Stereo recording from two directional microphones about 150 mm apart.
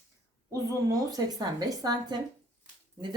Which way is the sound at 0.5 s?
25° right (ahead or behind).